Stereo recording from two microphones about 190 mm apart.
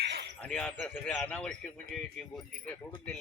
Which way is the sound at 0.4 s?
5° left (ahead or behind).